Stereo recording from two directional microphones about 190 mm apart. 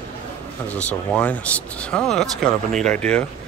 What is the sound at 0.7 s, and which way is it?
Speech, 5° left (ahead or behind).